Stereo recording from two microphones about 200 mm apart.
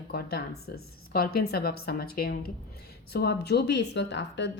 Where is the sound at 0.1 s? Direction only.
50° left (ahead or behind).